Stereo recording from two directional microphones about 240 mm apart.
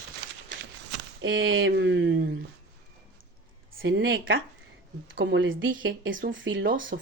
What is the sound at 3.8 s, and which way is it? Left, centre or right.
Speech, right.